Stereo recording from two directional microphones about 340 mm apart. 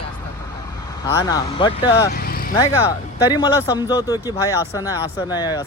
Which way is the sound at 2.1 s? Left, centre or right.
Left.